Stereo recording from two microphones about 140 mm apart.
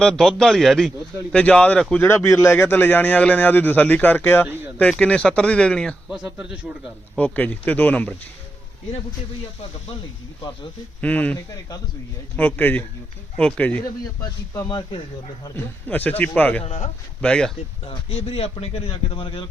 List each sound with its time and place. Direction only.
0.0 s a man's voice: 5° left (ahead or behind)
7.2 s a man's voice: 10° left (ahead or behind)
11.0 s a man's voice: 10° left (ahead or behind)
12.4 s a man's voice: 10° left (ahead or behind)
14.7 s a man's voice: 30° left (ahead or behind)
15.5 s a man's voice: 10° left (ahead or behind)
16.6 s a man's voice: 55° left (ahead or behind)
17.2 s a man's voice: 5° left (ahead or behind)
17.8 s a man's voice: 40° left (ahead or behind)